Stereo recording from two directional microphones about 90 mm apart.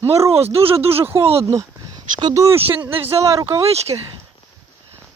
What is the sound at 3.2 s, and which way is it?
Speech, 35° right (ahead or behind).